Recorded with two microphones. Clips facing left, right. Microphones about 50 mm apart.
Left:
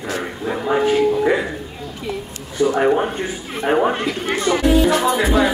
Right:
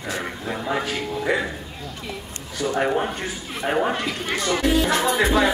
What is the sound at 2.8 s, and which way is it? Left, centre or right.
Music, centre.